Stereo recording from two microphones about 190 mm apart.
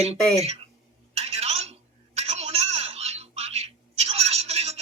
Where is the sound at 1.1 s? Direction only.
35° right (ahead or behind).